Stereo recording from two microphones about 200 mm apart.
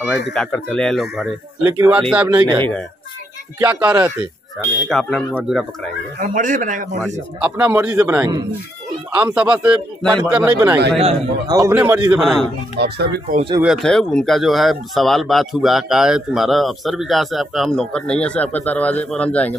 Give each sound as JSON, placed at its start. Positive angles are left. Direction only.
{"t": 0.3, "sound": "a man's voice", "side_deg": 5}
{"t": 2.2, "sound": "a man's voice", "side_deg": -20}
{"t": 4.8, "sound": "speech", "side_deg": 0}
{"t": 6.1, "sound": "a man's voice", "side_deg": -40}
{"t": 7.3, "sound": "a man's voice", "side_deg": -5}
{"t": 10.0, "sound": "speech", "side_deg": 5}
{"t": 10.3, "sound": "a man's voice", "side_deg": -10}
{"t": 11.0, "sound": "a man's voice", "side_deg": -30}
{"t": 11.5, "sound": "a man's voice", "side_deg": -10}
{"t": 12.1, "sound": "speech", "side_deg": 0}
{"t": 12.7, "sound": "speech", "side_deg": -55}
{"t": 13.6, "sound": "speech", "side_deg": 0}